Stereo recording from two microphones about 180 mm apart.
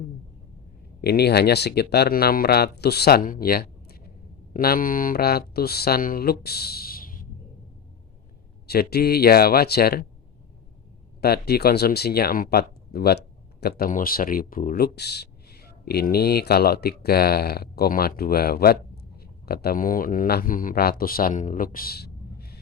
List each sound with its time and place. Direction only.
1.0 s speech: 65° left (ahead or behind)
8.6 s speech: 60° left (ahead or behind)
11.2 s speech: 60° left (ahead or behind)